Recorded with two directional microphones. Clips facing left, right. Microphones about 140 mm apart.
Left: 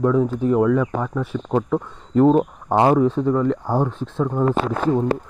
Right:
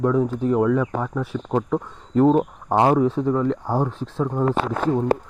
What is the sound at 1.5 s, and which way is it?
Speech, 10° left (ahead or behind).